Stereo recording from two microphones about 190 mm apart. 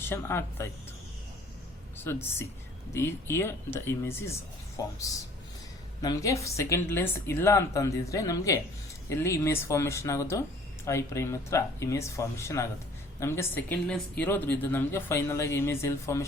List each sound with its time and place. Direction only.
0.0 s speech: 10° left (ahead or behind)
2.0 s speech: 10° left (ahead or behind)